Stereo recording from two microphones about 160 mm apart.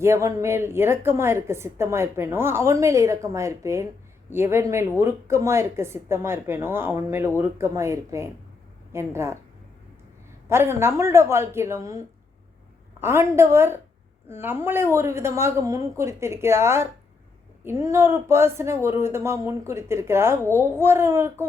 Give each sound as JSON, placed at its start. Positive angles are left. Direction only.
{"t": 0.0, "sound": "a woman's voice", "side_deg": -15}
{"t": 10.5, "sound": "a woman's voice", "side_deg": -15}